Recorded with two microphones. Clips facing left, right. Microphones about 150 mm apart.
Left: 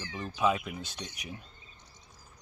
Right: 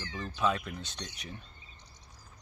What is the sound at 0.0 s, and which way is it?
Speech, 10° left (ahead or behind).